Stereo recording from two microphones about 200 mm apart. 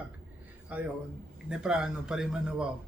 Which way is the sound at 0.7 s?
5° right (ahead or behind).